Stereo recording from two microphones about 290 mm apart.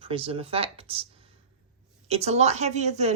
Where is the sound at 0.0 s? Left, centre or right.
Centre.